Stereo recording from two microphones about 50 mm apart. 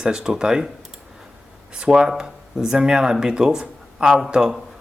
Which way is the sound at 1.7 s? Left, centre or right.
Centre.